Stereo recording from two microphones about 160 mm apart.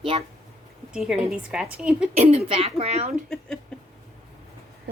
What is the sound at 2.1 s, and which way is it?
Speech, 40° right (ahead or behind).